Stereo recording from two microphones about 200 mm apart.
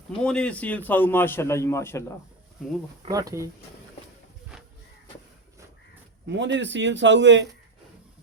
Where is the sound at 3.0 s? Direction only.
20° right (ahead or behind).